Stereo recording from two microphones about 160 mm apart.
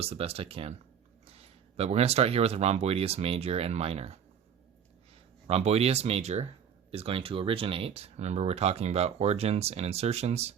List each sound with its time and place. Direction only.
0.0 s speech: 40° right (ahead or behind)
5.5 s speech: 40° right (ahead or behind)